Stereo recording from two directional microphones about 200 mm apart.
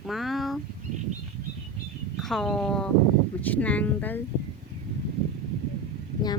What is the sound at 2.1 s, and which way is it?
Speech, centre (ahead or behind).